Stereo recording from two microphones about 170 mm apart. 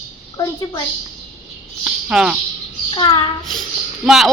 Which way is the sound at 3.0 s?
25° left (ahead or behind).